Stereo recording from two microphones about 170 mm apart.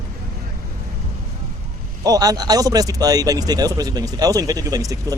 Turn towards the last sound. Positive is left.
turn(degrees=-20)  # may be behind; listen again after turning